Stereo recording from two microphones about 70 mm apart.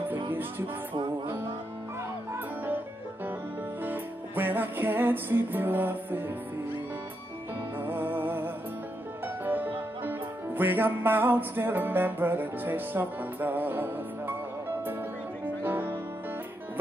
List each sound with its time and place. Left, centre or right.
0.1 s music: right
2.3 s music: right
3.8 s music: right
7.8 s music: right
15.4 s music: right